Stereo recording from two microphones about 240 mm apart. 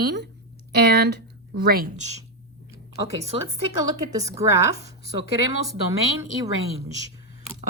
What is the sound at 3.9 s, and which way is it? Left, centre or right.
Speech, centre.